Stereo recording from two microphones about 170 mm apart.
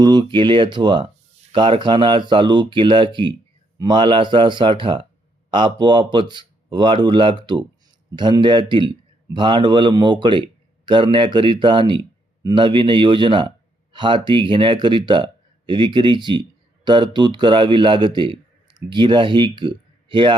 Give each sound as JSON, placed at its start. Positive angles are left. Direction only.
{"t": 0.0, "sound": "speech", "side_deg": -25}